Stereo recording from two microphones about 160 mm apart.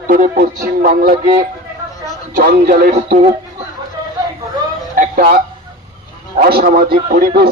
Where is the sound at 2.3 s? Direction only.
60° right (ahead or behind).